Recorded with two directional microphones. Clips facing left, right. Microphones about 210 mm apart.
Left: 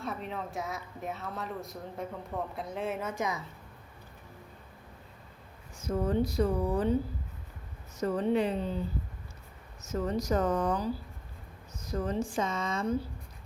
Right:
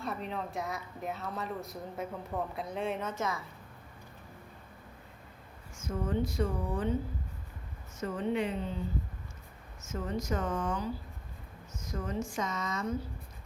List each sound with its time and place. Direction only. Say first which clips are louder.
0.0 s speech: even; centre (ahead or behind)
5.8 s speech: left 4 dB; 35° left (ahead or behind)
7.9 s speech: left 4 dB; 35° left (ahead or behind)
9.8 s speech: left 4 dB; 35° left (ahead or behind)